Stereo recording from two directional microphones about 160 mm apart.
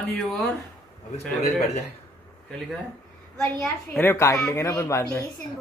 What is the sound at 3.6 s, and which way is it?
A woman's voice, 10° left (ahead or behind).